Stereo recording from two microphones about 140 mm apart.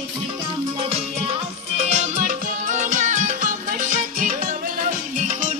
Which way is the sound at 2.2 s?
65° right (ahead or behind).